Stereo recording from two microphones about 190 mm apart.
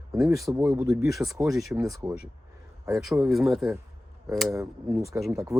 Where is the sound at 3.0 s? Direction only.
Centre (ahead or behind).